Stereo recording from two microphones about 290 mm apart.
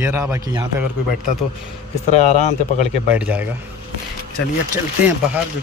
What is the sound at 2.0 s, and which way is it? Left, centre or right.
Speech, left.